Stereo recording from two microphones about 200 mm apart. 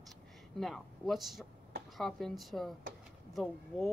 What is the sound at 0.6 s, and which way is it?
Speech, centre (ahead or behind).